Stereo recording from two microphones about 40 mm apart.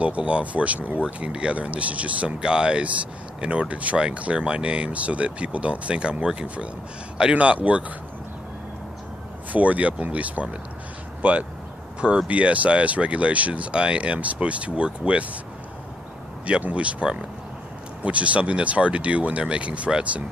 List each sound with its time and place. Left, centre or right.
0.0 s speech: right
1.0 s speech: right
2.4 s speech: right
6.4 s speech: right
9.5 s speech: right
16.4 s speech: right